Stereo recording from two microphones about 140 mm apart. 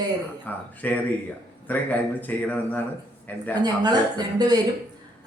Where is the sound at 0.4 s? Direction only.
10° left (ahead or behind).